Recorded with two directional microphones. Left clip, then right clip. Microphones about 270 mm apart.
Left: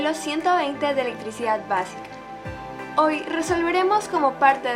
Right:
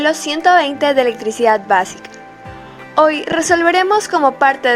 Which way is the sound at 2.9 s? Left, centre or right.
Right.